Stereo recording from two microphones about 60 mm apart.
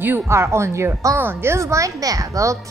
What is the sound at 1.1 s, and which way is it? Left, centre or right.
A woman's voice, right.